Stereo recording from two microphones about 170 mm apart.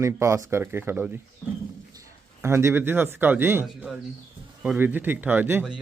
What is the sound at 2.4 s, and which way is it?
Speech, 15° right (ahead or behind).